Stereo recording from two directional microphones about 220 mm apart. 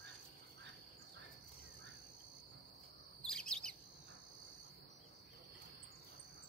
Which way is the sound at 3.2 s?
Centre (ahead or behind).